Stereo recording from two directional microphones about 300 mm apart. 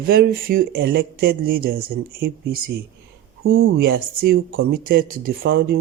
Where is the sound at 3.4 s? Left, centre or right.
Right.